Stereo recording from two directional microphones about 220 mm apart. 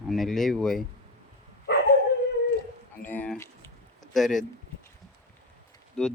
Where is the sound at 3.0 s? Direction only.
5° left (ahead or behind).